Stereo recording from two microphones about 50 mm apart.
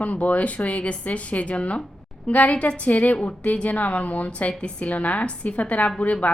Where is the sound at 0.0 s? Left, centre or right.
Left.